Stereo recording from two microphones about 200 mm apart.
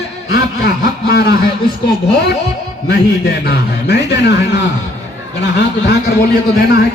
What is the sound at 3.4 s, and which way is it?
A man's voice, 55° left (ahead or behind).